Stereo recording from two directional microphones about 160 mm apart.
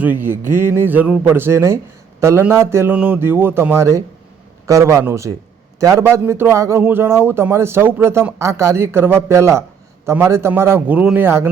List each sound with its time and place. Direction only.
0.0 s a man's voice: 10° right (ahead or behind)